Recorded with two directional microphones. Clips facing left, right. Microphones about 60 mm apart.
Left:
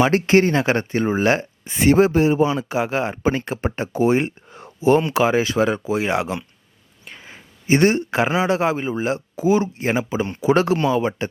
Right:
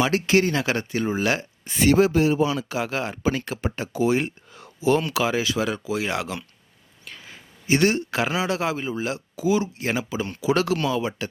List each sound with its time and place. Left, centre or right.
0.0 s a man's voice: left